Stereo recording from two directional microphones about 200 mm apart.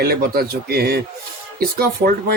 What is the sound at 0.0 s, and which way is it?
Speech, 50° right (ahead or behind).